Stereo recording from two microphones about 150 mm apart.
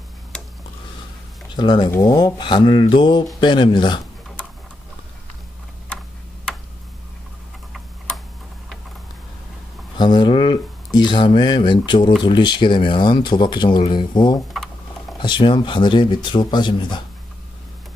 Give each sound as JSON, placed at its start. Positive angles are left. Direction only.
{"t": 1.5, "sound": "speech", "side_deg": 30}
{"t": 9.9, "sound": "speech", "side_deg": 30}